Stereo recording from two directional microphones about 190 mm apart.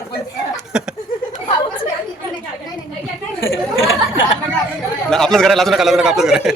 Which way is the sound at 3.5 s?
90° left.